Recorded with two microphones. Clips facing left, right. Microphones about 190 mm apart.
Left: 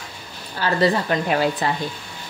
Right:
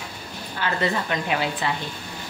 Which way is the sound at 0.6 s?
35° left (ahead or behind).